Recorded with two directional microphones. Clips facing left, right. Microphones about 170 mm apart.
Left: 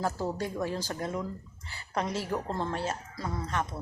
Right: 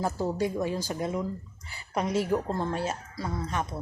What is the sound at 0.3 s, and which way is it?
Speech, 15° right (ahead or behind).